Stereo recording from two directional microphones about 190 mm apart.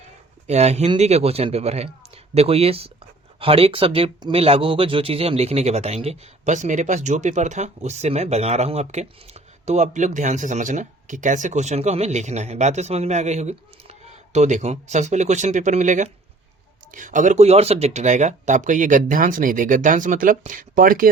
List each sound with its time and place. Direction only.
0.4 s speech: 35° right (ahead or behind)